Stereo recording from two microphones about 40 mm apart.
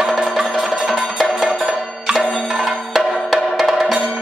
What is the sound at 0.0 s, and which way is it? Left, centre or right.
Music, centre.